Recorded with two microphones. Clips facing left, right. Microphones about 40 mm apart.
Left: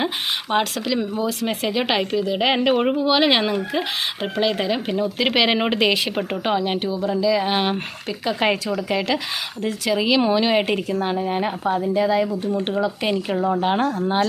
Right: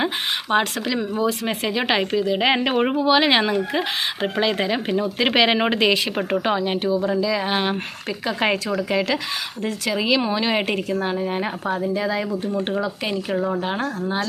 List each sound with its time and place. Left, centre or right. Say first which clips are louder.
0.5 s speech: even; centre
1.3 s speech: even; centre
7.0 s speech: left 2 dB; centre
13.6 s speech: left 5 dB; centre